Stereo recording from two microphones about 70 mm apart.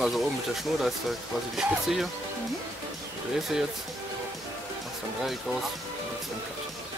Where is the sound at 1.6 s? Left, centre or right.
Centre.